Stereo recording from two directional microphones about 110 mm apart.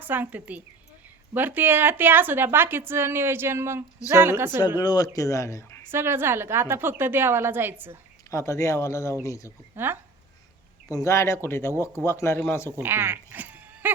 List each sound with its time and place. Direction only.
0.0 s a woman's voice: 15° right (ahead or behind)
4.8 s speech: 35° left (ahead or behind)
5.9 s a woman's voice: 20° right (ahead or behind)
8.3 s speech: 25° left (ahead or behind)
9.7 s a woman's voice: 20° right (ahead or behind)
10.8 s speech: 25° left (ahead or behind)
12.7 s a sound: 20° right (ahead or behind)